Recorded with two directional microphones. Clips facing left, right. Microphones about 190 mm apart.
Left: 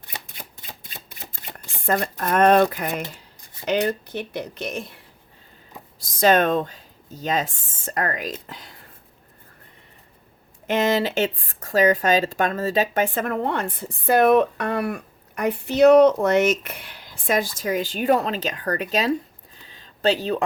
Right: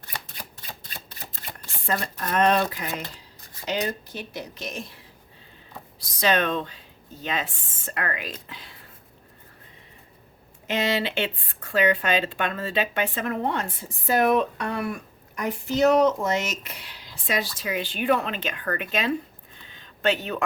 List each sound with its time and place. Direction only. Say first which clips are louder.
1.8 s speech: left 5 dB; 50° left (ahead or behind)
6.0 s speech: left 6 dB; 45° left (ahead or behind)
10.7 s speech: left 5 dB; 50° left (ahead or behind)
19.6 s a sound: left 3 dB; 35° left (ahead or behind)